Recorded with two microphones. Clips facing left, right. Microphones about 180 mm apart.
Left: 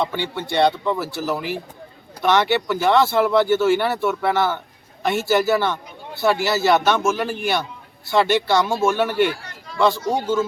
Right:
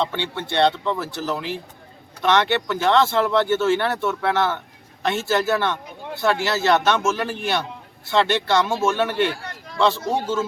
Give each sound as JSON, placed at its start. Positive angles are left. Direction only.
{"t": 0.0, "sound": "speech", "side_deg": 5}